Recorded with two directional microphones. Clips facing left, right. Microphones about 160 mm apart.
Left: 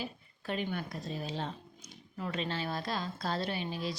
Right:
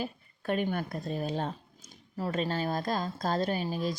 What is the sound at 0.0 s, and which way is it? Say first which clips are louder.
A woman's voice: right 5 dB; 50° right (ahead or behind).